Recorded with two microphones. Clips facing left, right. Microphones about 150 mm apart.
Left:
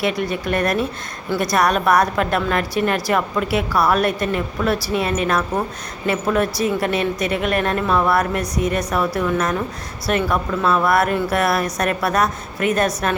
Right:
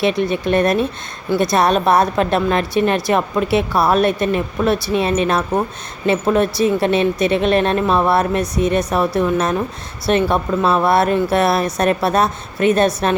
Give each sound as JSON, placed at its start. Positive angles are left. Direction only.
{"t": 0.0, "sound": "a woman's voice", "side_deg": -25}